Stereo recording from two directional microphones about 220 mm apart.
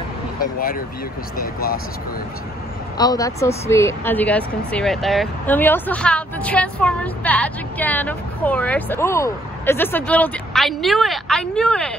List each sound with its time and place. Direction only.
0.4 s speech: 40° left (ahead or behind)
3.0 s speech: 15° left (ahead or behind)